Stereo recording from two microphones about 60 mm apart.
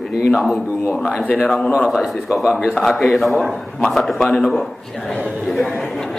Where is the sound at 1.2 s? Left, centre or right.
Left.